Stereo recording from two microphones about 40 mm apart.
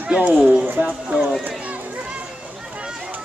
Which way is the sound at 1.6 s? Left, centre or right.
Right.